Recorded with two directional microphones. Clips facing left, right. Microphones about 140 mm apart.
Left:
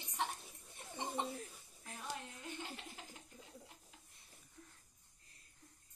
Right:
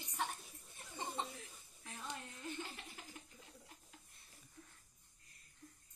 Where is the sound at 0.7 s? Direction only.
15° left (ahead or behind).